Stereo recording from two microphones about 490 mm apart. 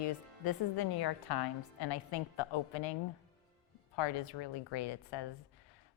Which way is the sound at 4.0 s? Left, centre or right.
Left.